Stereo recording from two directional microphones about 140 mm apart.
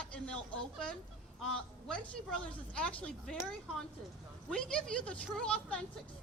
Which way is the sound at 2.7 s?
10° left (ahead or behind).